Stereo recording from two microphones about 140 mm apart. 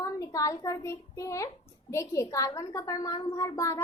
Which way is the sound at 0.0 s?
25° left (ahead or behind).